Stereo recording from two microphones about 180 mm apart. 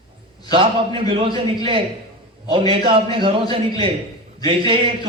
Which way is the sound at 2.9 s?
30° right (ahead or behind).